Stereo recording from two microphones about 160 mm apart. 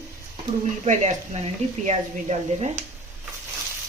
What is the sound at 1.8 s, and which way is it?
A woman's voice, 45° right (ahead or behind).